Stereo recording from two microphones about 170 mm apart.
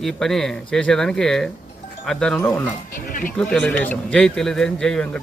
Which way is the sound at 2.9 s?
50° left (ahead or behind).